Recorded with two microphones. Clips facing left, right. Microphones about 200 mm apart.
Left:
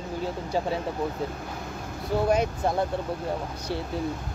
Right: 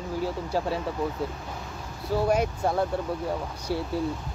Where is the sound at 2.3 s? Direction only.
10° right (ahead or behind).